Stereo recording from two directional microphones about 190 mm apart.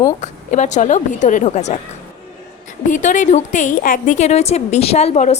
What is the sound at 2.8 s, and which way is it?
A woman's voice, 40° left (ahead or behind).